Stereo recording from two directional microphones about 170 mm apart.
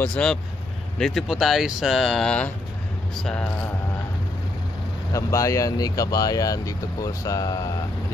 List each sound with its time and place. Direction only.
0.0 s speech: 5° left (ahead or behind)
5.1 s speech: 20° left (ahead or behind)